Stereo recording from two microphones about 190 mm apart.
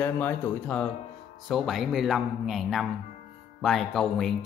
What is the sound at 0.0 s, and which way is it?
Speech, 10° left (ahead or behind).